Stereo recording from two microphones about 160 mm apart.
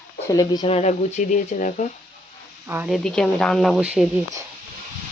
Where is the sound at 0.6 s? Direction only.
40° left (ahead or behind).